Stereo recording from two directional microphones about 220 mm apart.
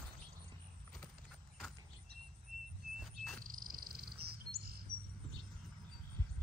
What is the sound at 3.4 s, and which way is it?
Bird, 40° right (ahead or behind).